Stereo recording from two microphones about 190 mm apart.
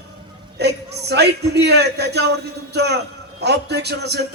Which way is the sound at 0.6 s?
60° right (ahead or behind).